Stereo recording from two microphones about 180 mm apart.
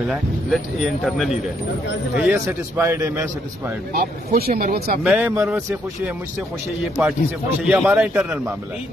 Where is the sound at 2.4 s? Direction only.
15° right (ahead or behind).